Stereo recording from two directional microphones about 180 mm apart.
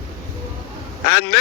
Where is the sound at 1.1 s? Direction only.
65° left (ahead or behind).